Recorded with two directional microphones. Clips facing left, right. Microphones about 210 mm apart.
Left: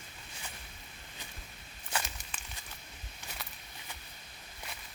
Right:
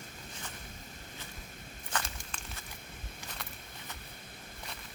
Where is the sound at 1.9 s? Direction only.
10° left (ahead or behind).